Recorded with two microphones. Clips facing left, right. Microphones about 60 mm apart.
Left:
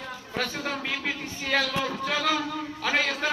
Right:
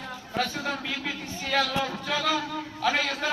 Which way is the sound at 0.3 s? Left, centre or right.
Left.